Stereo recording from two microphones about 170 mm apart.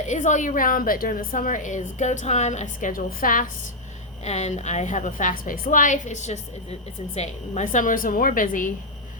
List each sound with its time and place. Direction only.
0.0 s a woman's voice: 45° left (ahead or behind)
4.2 s a woman's voice: 40° left (ahead or behind)